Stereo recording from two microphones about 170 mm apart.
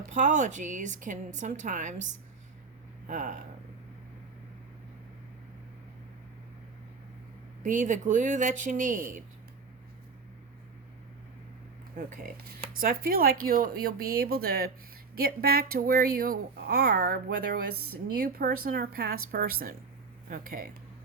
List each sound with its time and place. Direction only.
0.1 s a woman's voice: 45° right (ahead or behind)
7.6 s a woman's voice: 45° right (ahead or behind)
11.9 s a woman's voice: 55° right (ahead or behind)